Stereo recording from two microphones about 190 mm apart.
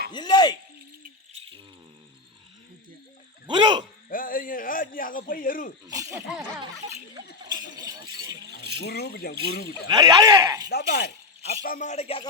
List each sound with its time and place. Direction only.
0.1 s speech: 25° left (ahead or behind)
3.4 s a sound: 25° right (ahead or behind)
4.1 s a sound: 45° left (ahead or behind)
5.8 s speech: 15° right (ahead or behind)
7.4 s speech: 20° right (ahead or behind)
8.4 s speech: 60° left (ahead or behind)
9.9 s speech: 20° right (ahead or behind)
10.7 s speech: 55° left (ahead or behind)
11.6 s a man's voice: 45° left (ahead or behind); by 12.3 s 30° left (ahead or behind)